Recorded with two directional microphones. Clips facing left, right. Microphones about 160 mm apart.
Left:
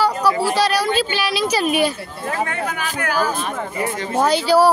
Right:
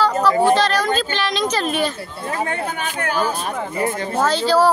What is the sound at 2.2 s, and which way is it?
Speech, 30° right (ahead or behind).